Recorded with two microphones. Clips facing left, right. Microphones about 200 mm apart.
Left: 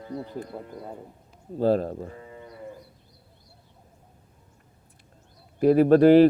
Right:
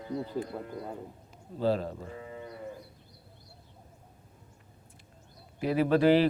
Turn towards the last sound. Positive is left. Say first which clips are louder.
# left 8 dB
turn(degrees=50)  # may be behind; listen again after turning